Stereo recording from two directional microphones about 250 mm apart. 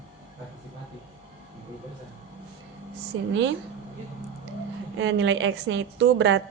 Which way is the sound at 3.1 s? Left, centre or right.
Right.